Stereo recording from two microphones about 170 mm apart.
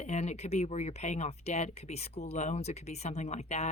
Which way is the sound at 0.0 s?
40° left (ahead or behind).